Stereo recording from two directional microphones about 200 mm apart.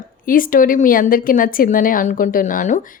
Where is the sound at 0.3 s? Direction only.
45° left (ahead or behind).